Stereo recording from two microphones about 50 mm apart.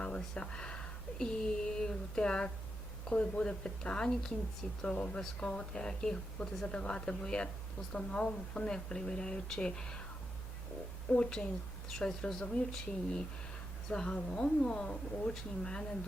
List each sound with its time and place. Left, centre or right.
0.0 s speech: centre
6.7 s speech: left
11.2 s speech: centre